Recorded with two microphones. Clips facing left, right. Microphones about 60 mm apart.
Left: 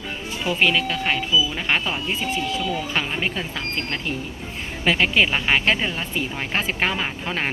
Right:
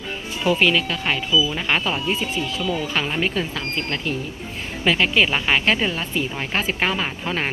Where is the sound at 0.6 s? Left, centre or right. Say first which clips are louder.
Right 1 dB; left.